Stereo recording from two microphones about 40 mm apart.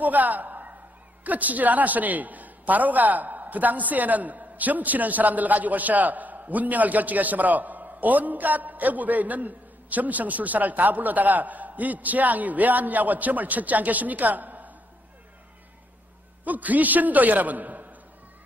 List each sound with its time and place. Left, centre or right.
0.0 s a sound: right
1.2 s a man's voice: right
16.4 s a man's voice: right